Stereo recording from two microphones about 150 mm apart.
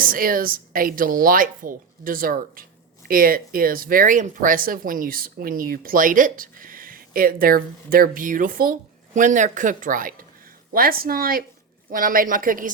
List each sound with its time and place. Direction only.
0.0 s speech: 70° right (ahead or behind)